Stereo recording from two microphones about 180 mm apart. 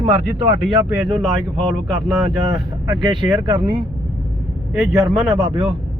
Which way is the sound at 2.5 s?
20° right (ahead or behind).